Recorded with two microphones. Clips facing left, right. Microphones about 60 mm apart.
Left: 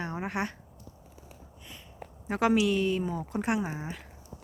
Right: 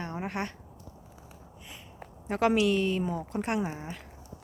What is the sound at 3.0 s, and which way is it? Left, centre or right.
Speech, centre.